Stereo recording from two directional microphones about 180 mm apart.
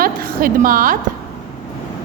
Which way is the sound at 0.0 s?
50° right (ahead or behind).